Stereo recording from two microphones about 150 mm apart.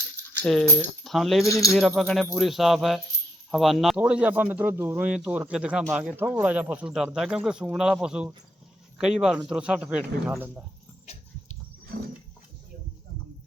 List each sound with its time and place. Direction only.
0.4 s speech: centre (ahead or behind)
11.0 s dog: 45° left (ahead or behind)